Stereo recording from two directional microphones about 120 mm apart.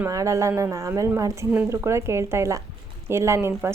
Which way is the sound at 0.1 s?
25° right (ahead or behind).